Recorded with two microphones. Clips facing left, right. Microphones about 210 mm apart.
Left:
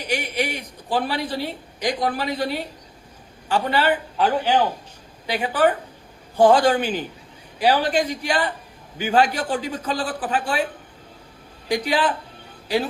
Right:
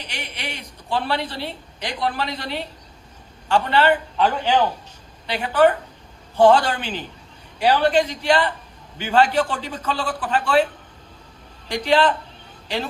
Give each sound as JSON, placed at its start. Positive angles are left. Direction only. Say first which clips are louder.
{"t": 0.0, "sound": "a sound", "louder": "left 9 dB", "side_deg": 10}
{"t": 0.9, "sound": "a man's voice", "louder": "left 1 dB", "side_deg": 10}
{"t": 11.7, "sound": "a man's voice", "louder": "right 3 dB", "side_deg": 10}